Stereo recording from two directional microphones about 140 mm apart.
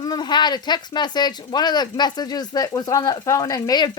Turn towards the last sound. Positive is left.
turn(degrees=25)  # may be behind; listen again after turning